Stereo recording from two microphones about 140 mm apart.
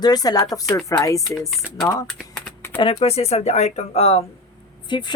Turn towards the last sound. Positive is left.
turn(degrees=35)  # may be behind; listen again after turning